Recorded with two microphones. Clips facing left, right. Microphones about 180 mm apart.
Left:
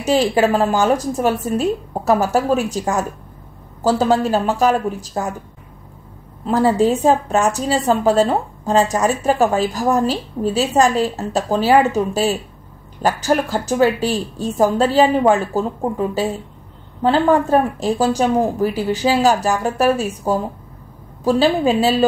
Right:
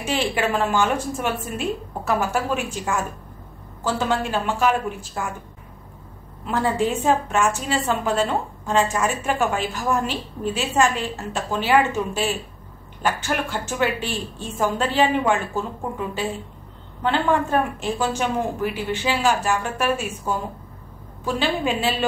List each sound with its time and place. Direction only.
0.0 s a woman's voice: 40° left (ahead or behind)
6.4 s a woman's voice: 40° left (ahead or behind)